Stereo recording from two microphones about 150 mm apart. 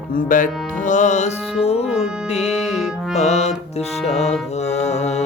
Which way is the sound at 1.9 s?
5° right (ahead or behind).